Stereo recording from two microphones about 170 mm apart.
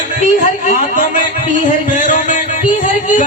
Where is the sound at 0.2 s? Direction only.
50° left (ahead or behind).